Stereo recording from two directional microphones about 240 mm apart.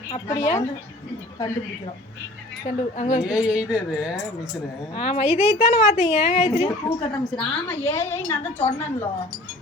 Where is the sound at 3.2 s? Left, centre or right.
Centre.